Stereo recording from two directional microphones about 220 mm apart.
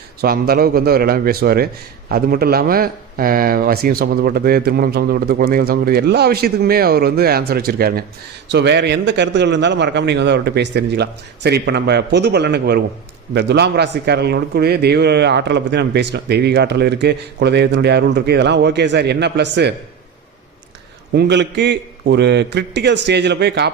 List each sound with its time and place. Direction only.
0.2 s a man's voice: 45° right (ahead or behind)
21.1 s a man's voice: 50° right (ahead or behind)